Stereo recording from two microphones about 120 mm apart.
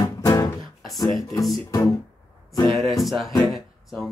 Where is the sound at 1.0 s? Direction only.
30° left (ahead or behind).